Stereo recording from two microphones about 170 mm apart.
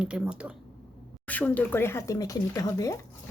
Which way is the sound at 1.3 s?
10° left (ahead or behind).